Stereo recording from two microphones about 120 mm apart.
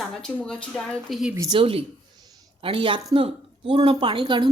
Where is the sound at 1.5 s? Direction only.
50° right (ahead or behind).